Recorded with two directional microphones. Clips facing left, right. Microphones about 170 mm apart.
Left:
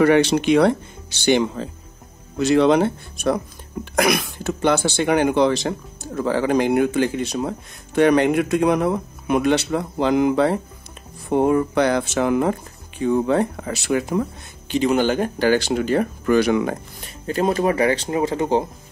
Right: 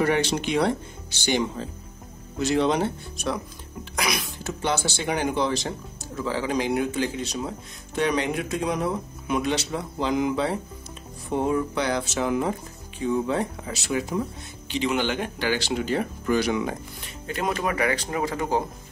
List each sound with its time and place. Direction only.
0.0 s speech: 70° left (ahead or behind)
14.7 s speech: 45° left (ahead or behind)
17.3 s speech: 35° left (ahead or behind)